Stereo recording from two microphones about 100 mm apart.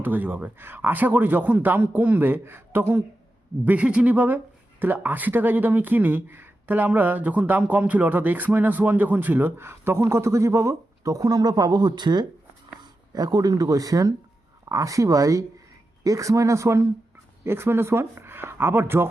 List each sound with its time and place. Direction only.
0.0 s speech: 15° right (ahead or behind)